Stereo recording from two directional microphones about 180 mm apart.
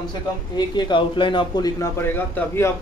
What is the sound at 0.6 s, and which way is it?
A man's voice, 25° left (ahead or behind).